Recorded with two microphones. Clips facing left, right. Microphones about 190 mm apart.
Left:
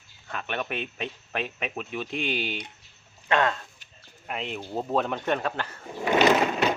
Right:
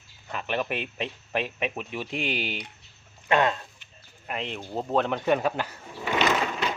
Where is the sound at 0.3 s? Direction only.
5° right (ahead or behind).